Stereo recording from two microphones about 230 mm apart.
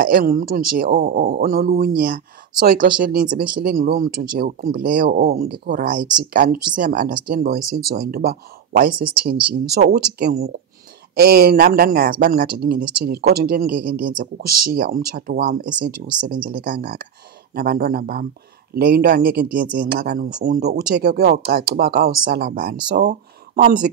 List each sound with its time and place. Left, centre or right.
0.0 s speech: right